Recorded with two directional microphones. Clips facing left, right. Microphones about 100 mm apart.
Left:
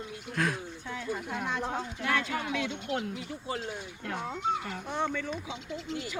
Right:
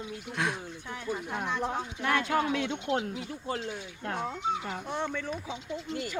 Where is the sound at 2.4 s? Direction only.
40° right (ahead or behind).